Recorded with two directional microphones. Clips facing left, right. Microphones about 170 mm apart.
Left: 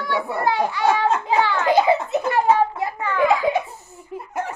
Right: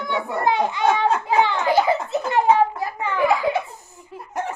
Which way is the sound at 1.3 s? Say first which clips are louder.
Right 1 dB; 20° right (ahead or behind).